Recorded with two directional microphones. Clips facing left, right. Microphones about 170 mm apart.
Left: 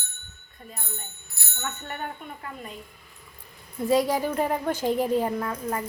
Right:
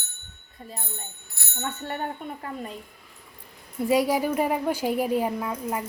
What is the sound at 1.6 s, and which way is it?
Speech, 30° right (ahead or behind).